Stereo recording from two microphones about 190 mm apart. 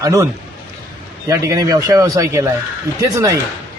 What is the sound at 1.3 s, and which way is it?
A man's voice, 15° right (ahead or behind).